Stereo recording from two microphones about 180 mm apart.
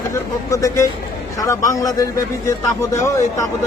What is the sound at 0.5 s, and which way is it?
A man's voice, 15° left (ahead or behind).